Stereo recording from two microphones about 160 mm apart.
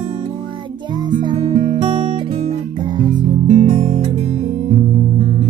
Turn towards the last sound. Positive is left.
turn(degrees=-40)  # may be behind; listen again after turning